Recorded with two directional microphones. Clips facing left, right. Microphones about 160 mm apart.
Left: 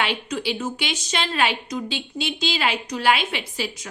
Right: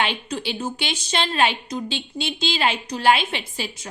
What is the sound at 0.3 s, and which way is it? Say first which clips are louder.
A woman's voice: left 1 dB; 30° right (ahead or behind).